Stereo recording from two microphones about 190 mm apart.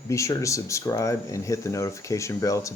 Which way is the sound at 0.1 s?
15° left (ahead or behind).